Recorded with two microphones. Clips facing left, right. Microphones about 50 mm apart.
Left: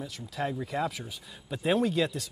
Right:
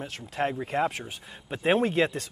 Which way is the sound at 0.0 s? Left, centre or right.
Right.